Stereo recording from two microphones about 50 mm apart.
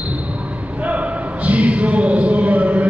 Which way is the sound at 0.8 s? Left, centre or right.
Right.